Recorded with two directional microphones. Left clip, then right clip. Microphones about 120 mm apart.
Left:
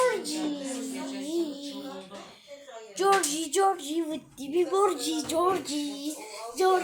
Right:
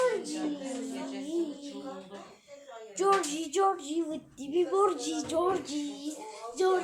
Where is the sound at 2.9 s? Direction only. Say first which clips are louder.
Left 3 dB; 20° left (ahead or behind).